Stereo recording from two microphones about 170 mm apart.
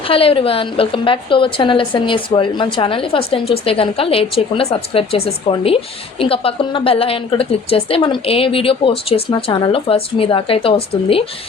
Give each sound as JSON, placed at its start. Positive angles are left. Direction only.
{"t": 0.1, "sound": "speech", "side_deg": 35}